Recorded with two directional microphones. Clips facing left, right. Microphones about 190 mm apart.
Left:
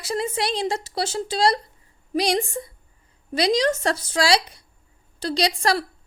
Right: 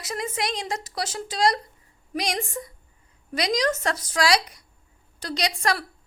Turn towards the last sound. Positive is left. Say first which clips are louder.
# left 4 dB
turn(degrees=30)  # may be behind; listen again after turning